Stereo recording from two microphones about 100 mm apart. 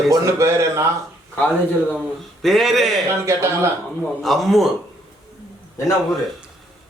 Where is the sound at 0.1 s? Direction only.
30° right (ahead or behind).